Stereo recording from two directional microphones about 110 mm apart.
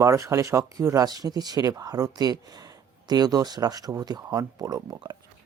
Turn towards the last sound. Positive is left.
turn(degrees=-40)  # may be behind; listen again after turning